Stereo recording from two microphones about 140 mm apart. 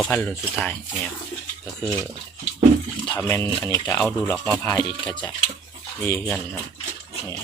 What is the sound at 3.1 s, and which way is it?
Speech, 20° left (ahead or behind).